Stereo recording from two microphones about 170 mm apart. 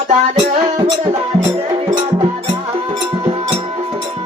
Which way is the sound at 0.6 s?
30° right (ahead or behind).